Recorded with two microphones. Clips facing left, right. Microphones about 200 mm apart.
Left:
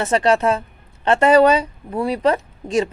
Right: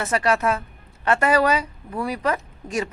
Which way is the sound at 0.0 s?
30° left (ahead or behind).